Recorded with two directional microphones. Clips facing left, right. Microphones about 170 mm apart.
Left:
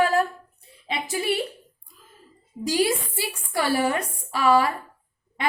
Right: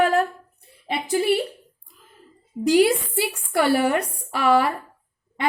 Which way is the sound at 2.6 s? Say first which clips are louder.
Right 6 dB; 60° right (ahead or behind).